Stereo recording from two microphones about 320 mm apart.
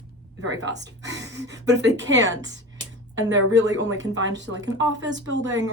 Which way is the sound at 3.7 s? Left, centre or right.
Right.